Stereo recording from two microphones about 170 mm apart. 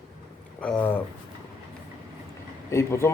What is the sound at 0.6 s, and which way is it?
Speech, 5° left (ahead or behind).